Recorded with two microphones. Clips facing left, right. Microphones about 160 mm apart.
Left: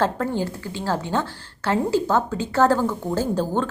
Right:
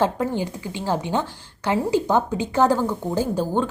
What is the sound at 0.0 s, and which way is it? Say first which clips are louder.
A woman's voice: right 1 dB; 15° right (ahead or behind).